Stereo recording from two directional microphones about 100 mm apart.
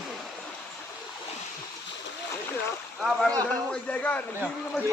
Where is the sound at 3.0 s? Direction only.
Centre (ahead or behind).